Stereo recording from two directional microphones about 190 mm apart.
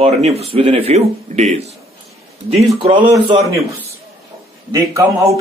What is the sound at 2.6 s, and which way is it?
Speech, 30° right (ahead or behind).